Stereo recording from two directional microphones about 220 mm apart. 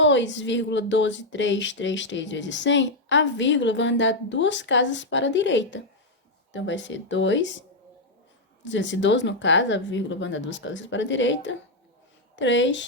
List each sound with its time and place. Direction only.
0.0 s speech: 55° left (ahead or behind)
8.6 s speech: 55° left (ahead or behind)